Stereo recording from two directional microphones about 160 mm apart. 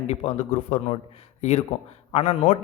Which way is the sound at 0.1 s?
40° left (ahead or behind).